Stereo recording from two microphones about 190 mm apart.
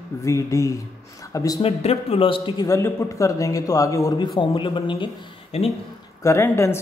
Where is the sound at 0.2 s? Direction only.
15° left (ahead or behind).